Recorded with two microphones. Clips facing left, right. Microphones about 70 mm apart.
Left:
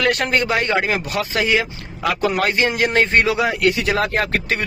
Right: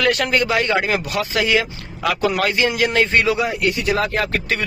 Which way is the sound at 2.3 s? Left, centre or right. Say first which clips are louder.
Even; left.